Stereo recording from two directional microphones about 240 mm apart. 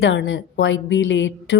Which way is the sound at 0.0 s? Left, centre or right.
Left.